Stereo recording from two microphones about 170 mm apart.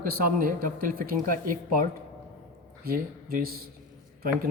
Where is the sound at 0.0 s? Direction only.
55° right (ahead or behind).